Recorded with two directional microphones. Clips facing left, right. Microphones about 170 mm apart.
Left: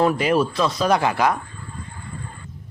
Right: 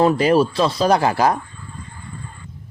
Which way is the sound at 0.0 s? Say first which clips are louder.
Right 4 dB; 30° right (ahead or behind).